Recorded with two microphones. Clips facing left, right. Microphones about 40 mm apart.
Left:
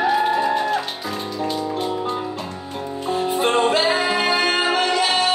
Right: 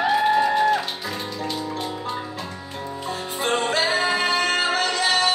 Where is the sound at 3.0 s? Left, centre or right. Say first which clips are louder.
Left 6 dB; left.